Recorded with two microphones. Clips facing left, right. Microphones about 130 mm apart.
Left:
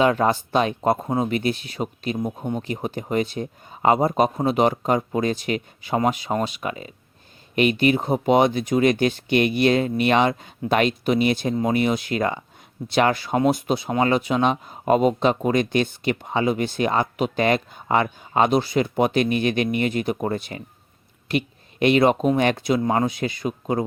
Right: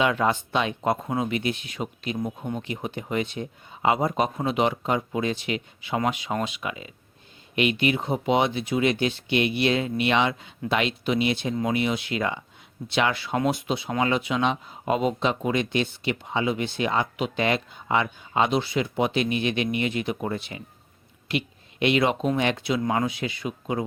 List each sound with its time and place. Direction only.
0.0 s speech: 40° left (ahead or behind)